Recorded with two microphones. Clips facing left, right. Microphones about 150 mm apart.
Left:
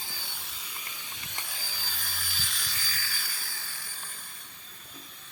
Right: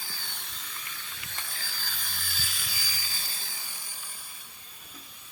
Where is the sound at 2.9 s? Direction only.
15° right (ahead or behind).